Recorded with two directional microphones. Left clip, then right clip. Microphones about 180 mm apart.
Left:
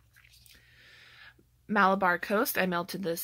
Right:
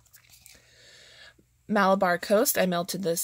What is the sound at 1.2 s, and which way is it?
Speech, 35° right (ahead or behind).